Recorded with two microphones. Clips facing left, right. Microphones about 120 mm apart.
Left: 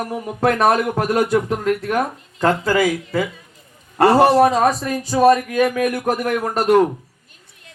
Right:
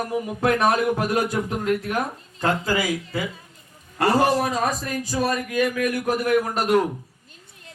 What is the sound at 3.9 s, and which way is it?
A man's voice, 70° left (ahead or behind).